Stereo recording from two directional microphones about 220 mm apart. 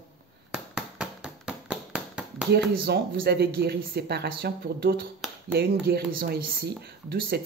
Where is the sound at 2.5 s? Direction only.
45° right (ahead or behind).